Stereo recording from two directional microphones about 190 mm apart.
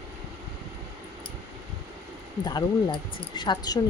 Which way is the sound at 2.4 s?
20° left (ahead or behind).